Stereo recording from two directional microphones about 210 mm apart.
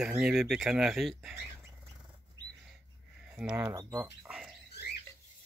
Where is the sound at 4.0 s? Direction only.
5° right (ahead or behind).